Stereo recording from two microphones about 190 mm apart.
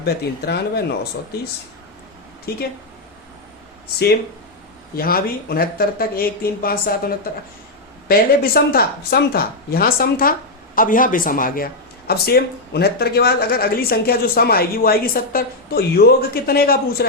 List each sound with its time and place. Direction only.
0.0 s speech: 60° left (ahead or behind)
2.5 s speech: 55° left (ahead or behind)
3.9 s speech: 55° left (ahead or behind)
8.0 s speech: 50° left (ahead or behind)